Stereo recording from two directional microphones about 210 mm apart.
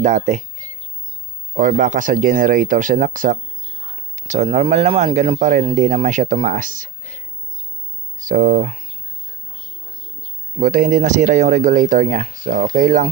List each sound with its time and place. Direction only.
0.0 s speech: 35° right (ahead or behind)
1.5 s speech: 40° right (ahead or behind)
8.2 s speech: 40° right (ahead or behind)
10.6 s speech: 40° right (ahead or behind)